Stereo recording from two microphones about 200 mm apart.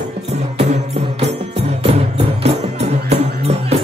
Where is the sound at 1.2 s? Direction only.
30° right (ahead or behind).